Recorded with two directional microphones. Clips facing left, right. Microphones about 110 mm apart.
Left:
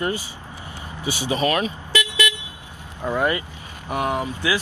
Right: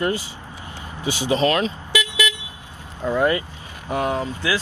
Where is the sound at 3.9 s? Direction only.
15° left (ahead or behind).